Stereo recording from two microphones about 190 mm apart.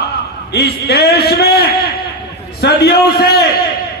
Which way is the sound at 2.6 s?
55° left (ahead or behind).